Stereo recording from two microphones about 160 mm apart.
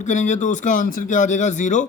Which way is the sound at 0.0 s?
50° left (ahead or behind).